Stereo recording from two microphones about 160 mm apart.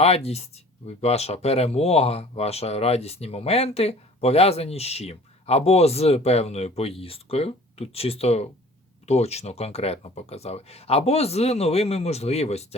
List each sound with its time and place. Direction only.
0.0 s speech: 40° left (ahead or behind)